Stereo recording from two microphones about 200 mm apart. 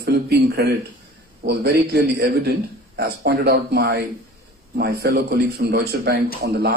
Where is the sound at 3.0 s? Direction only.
50° right (ahead or behind).